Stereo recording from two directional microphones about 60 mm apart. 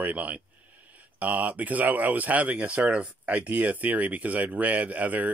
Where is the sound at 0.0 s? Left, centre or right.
Right.